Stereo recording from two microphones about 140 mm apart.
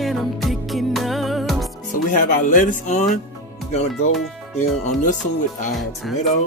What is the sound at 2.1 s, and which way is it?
Speech, 70° left (ahead or behind).